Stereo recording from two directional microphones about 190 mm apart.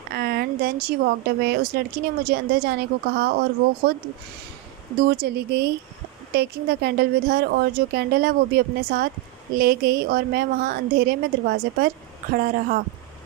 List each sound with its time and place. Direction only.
0.1 s speech: 55° right (ahead or behind)
5.0 s a woman's voice: 60° right (ahead or behind)